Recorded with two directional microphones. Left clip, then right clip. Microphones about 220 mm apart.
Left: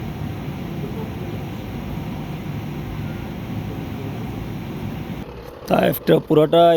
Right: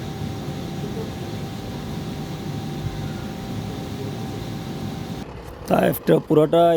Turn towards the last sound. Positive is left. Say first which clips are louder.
# left 2 dB
turn(degrees=-15)  # may be behind; listen again after turning